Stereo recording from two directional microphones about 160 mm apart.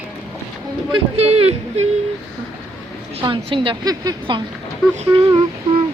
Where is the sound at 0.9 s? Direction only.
40° right (ahead or behind).